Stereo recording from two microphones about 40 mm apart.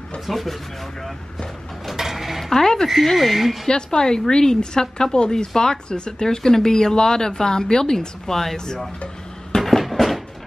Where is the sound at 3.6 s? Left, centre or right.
Centre.